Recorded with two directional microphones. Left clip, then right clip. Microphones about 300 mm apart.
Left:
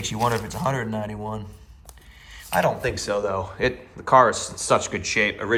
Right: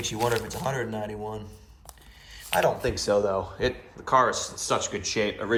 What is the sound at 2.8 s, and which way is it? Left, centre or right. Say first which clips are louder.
Speech: even; centre.